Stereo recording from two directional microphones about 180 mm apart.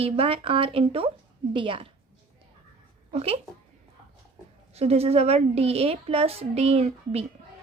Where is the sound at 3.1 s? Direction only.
35° right (ahead or behind).